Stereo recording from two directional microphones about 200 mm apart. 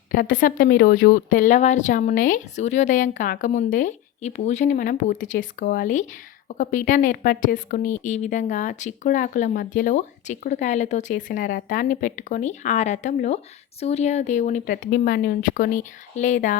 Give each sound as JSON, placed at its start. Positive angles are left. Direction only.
{"t": 0.1, "sound": "speech", "side_deg": 45}